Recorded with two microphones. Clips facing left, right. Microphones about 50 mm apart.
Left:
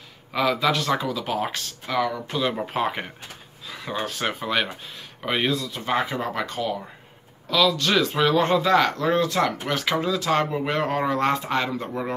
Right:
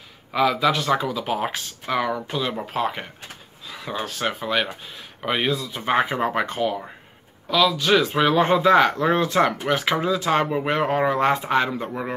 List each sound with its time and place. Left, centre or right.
0.3 s speech: centre
2.2 s a man's voice: centre
5.7 s speech: right
7.4 s a man's voice: centre